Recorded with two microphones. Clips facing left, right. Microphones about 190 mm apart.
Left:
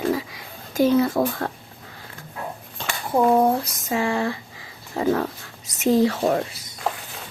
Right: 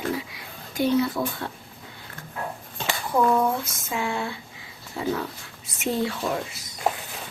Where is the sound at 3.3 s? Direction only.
40° left (ahead or behind).